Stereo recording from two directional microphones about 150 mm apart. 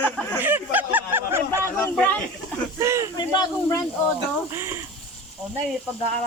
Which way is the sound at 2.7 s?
20° right (ahead or behind).